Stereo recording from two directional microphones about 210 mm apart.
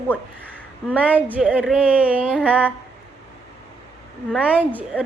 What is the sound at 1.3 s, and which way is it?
Speech, 5° right (ahead or behind).